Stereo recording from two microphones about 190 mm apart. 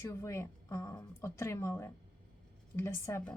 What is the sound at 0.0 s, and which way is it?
A woman's voice, 15° left (ahead or behind).